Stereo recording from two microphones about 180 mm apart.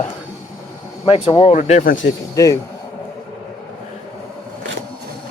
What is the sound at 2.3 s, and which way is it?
Speech, 20° left (ahead or behind).